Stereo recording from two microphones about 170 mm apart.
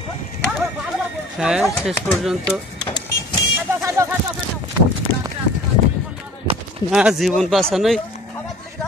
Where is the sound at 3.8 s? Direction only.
15° right (ahead or behind).